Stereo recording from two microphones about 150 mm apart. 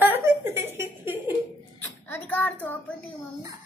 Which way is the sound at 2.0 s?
10° left (ahead or behind).